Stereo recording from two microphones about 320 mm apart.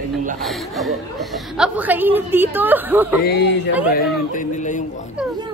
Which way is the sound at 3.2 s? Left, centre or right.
Left.